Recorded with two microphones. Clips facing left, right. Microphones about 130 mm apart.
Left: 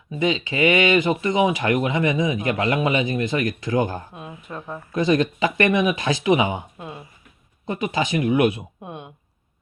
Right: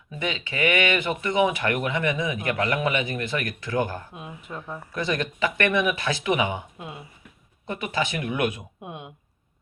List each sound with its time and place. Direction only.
0.4 s a man's voice: 15° left (ahead or behind)
7.7 s a man's voice: 15° left (ahead or behind)
8.8 s speech: 15° right (ahead or behind)